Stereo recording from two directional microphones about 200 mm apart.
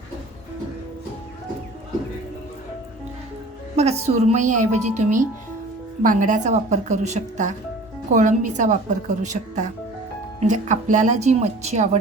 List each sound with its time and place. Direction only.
3.8 s a woman's voice: 30° right (ahead or behind)